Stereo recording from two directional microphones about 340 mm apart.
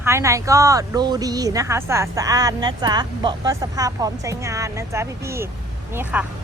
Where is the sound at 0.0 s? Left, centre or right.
Centre.